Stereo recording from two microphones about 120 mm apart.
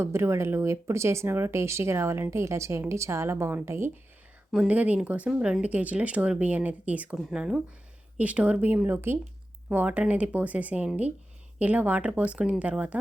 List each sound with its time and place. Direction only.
0.0 s speech: 20° right (ahead or behind)
4.5 s speech: 10° right (ahead or behind)